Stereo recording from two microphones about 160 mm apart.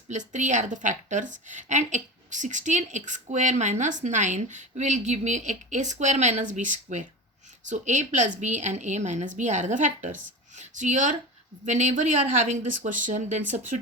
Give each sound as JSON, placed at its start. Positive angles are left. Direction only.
{"t": 0.1, "sound": "a woman's voice", "side_deg": -50}